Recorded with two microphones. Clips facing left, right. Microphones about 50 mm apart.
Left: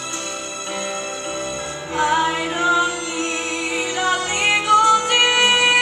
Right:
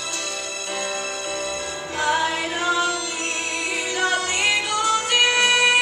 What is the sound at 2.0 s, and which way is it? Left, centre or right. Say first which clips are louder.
Music: left 3 dB; left.